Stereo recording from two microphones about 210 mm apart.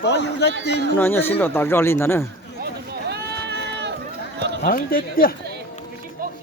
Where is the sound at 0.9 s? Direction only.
10° left (ahead or behind).